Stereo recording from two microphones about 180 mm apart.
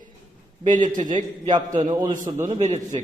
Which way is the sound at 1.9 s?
25° right (ahead or behind).